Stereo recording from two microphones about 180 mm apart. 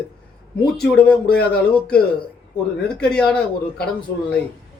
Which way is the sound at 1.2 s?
60° left (ahead or behind).